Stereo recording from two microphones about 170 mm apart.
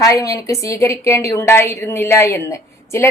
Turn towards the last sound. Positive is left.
turn(degrees=15)  # may be behind; listen again after turning